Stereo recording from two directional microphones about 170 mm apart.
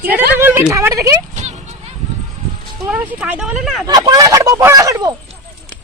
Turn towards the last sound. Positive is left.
turn(degrees=-20)  # may be behind; listen again after turning